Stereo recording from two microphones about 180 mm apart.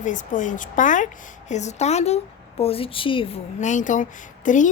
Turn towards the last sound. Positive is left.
turn(degrees=45)  # may be behind; listen again after turning